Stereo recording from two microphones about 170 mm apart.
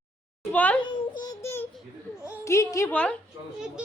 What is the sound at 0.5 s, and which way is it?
Speech, 10° left (ahead or behind).